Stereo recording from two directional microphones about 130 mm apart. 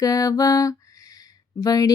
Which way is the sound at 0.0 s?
25° left (ahead or behind).